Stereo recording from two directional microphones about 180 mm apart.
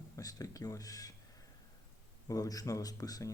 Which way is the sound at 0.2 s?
20° left (ahead or behind).